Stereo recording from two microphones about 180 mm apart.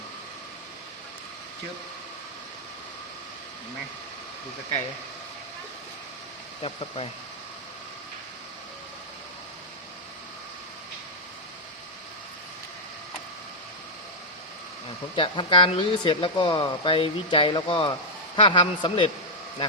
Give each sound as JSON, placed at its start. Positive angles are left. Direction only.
{"t": 6.6, "sound": "speech", "side_deg": 30}
{"t": 15.1, "sound": "speech", "side_deg": 30}